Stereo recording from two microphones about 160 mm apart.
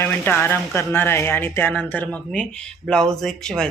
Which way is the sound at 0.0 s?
15° left (ahead or behind).